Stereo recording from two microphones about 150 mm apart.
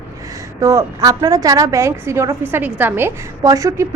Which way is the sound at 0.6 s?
20° right (ahead or behind).